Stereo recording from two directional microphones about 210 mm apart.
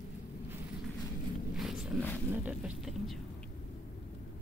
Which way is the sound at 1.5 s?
Centre (ahead or behind).